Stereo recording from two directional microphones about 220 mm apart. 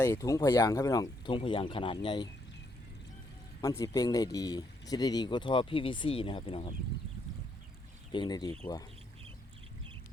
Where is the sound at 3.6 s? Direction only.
15° left (ahead or behind).